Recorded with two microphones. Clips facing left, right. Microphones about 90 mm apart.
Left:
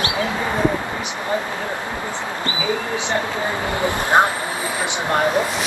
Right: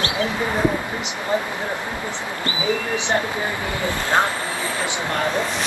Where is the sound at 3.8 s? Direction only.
20° left (ahead or behind).